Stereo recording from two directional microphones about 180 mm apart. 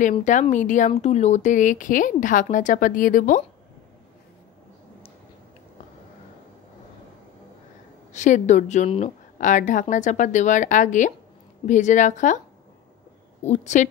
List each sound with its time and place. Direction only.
0.2 s speech: 40° left (ahead or behind)
8.1 s speech: 40° left (ahead or behind)
13.4 s a woman's voice: 40° left (ahead or behind)